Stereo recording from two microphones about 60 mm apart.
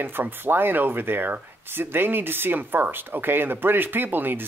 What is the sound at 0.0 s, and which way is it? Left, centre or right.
Speech, right.